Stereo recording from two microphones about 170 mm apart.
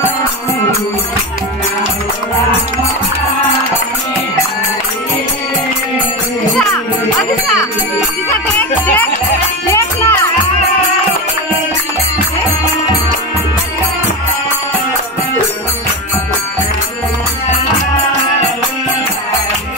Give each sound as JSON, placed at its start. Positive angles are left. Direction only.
{"t": 8.5, "sound": "music", "side_deg": 10}